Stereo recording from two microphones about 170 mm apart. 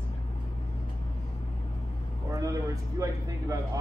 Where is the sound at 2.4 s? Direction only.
20° right (ahead or behind).